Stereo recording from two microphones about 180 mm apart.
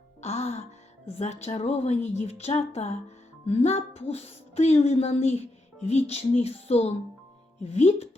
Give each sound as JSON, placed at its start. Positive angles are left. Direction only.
{"t": 0.2, "sound": "music", "side_deg": 35}
{"t": 1.1, "sound": "a woman's voice", "side_deg": 40}